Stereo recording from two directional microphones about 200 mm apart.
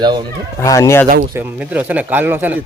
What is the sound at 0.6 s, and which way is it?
Speech, 15° left (ahead or behind).